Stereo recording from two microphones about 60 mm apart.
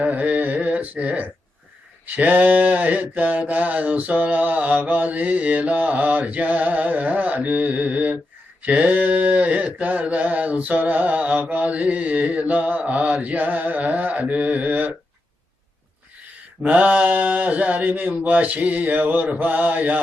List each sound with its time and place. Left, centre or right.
0.0 s a sound: right
2.0 s mantra: right
16.6 s mantra: right